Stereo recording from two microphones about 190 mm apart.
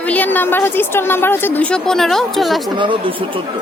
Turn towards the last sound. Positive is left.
turn(degrees=-25)  # may be behind; listen again after turning